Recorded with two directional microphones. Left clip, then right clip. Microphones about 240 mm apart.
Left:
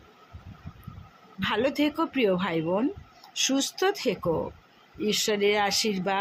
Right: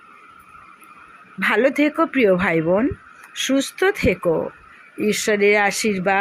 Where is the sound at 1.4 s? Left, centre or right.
Right.